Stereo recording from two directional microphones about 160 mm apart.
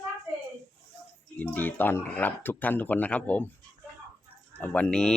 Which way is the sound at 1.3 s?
10° left (ahead or behind).